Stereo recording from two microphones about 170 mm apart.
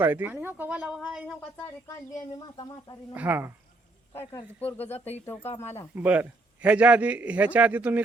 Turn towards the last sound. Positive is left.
turn(degrees=-10)  # may be behind; listen again after turning